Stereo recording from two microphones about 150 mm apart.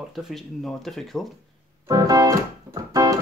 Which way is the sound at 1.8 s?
25° right (ahead or behind).